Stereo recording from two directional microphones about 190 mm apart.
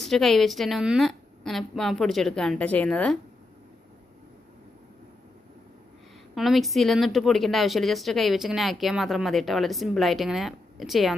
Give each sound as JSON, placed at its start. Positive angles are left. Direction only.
{"t": 0.0, "sound": "speech", "side_deg": 0}
{"t": 6.3, "sound": "speech", "side_deg": 0}